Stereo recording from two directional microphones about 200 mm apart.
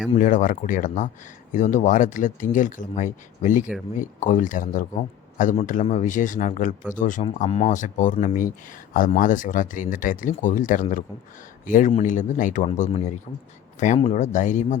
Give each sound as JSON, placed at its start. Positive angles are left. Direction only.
{"t": 0.2, "sound": "speech", "side_deg": 40}